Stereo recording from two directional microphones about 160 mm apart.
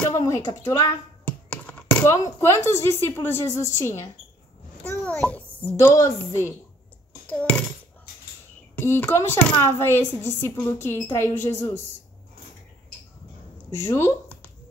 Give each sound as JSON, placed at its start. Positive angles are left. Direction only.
{"t": 0.1, "sound": "speech", "side_deg": 20}
{"t": 1.2, "sound": "a child's voice", "side_deg": 10}
{"t": 8.7, "sound": "speech", "side_deg": 15}
{"t": 13.7, "sound": "a sound", "side_deg": 20}